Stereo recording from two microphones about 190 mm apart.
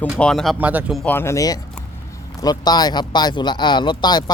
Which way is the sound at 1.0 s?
10° left (ahead or behind).